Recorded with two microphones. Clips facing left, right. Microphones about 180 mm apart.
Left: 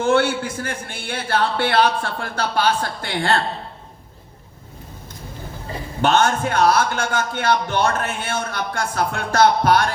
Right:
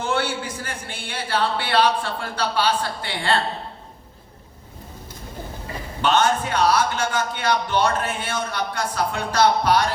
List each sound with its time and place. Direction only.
0.0 s a man's voice: 45° left (ahead or behind)
6.0 s a man's voice: 45° left (ahead or behind)